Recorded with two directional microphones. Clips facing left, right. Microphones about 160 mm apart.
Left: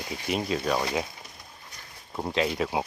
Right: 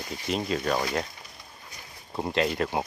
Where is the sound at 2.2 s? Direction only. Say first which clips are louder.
Right 1 dB; centre (ahead or behind).